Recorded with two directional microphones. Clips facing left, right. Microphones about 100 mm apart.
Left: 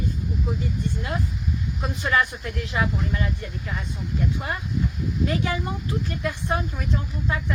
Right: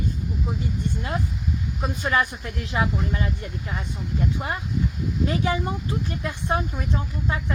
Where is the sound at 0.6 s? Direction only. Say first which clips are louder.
Even; 25° right (ahead or behind).